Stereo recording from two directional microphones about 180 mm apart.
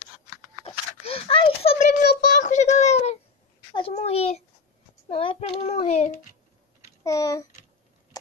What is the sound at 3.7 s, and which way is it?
A child's voice, 30° left (ahead or behind).